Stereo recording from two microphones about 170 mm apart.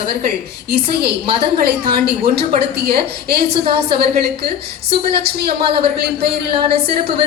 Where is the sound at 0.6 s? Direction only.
70° right (ahead or behind).